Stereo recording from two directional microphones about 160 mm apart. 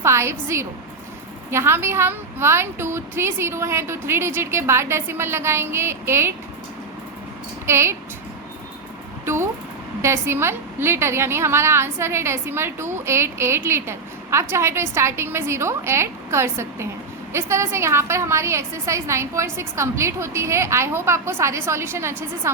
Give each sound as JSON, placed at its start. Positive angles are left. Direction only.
{"t": 0.0, "sound": "a woman's voice", "side_deg": -15}
{"t": 7.7, "sound": "a woman's voice", "side_deg": -15}
{"t": 9.2, "sound": "a sound", "side_deg": -15}
{"t": 10.0, "sound": "a woman's voice", "side_deg": -15}